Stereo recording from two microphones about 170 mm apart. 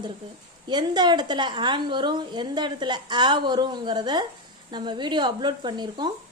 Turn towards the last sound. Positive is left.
turn(degrees=-25)  # may be behind; listen again after turning